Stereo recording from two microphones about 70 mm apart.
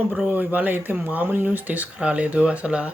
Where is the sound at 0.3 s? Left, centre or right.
Right.